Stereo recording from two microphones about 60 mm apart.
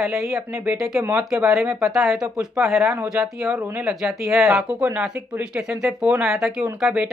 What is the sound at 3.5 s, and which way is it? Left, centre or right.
Speech, right.